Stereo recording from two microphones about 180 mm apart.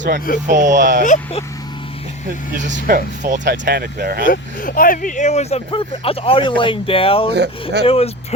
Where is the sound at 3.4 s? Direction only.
75° right (ahead or behind).